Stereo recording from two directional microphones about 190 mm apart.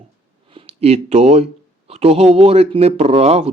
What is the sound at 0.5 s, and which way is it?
Speech, 30° right (ahead or behind).